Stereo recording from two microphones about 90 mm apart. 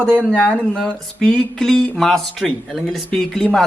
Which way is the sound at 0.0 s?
20° right (ahead or behind).